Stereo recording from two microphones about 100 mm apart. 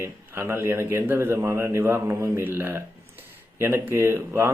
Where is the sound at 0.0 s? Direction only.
25° right (ahead or behind).